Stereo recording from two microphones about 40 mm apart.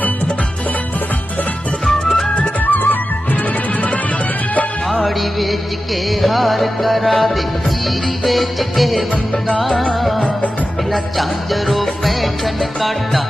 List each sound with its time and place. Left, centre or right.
1.8 s music: centre
2.6 s music: left
4.9 s music: centre
11.7 s music: centre